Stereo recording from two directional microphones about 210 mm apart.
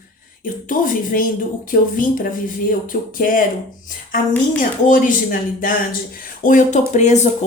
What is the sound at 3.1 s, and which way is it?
Speech, 40° left (ahead or behind).